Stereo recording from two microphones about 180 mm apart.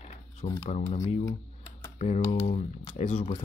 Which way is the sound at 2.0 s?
40° left (ahead or behind).